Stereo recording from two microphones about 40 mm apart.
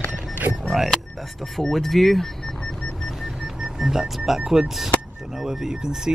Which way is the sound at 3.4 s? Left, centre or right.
Centre.